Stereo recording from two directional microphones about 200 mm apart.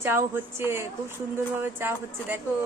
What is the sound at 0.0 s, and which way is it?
Speech, 10° right (ahead or behind).